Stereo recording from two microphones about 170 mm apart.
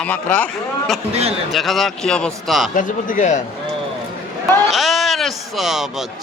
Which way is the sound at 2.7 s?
50° left (ahead or behind).